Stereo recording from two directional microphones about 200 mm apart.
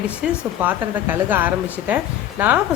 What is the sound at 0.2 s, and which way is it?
A woman's voice, 10° right (ahead or behind).